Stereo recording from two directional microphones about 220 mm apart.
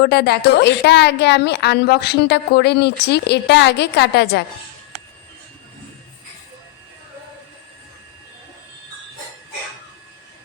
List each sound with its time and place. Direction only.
0.0 s a woman's voice: 45° left (ahead or behind)